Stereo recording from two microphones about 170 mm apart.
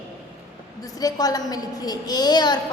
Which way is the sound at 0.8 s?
20° left (ahead or behind).